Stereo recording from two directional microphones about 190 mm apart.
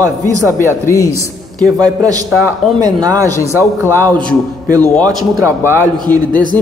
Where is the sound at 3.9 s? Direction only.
10° left (ahead or behind).